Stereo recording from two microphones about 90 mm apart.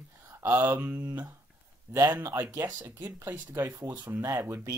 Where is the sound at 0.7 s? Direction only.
20° right (ahead or behind).